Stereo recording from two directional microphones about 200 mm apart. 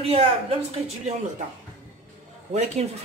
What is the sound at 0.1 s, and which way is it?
A woman's voice, 30° right (ahead or behind).